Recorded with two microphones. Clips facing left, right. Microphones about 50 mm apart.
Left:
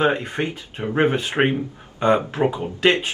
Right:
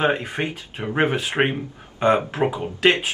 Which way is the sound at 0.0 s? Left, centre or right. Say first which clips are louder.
Left 1 dB; centre.